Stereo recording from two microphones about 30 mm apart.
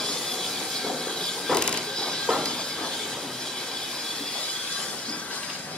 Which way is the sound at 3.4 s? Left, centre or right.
Centre.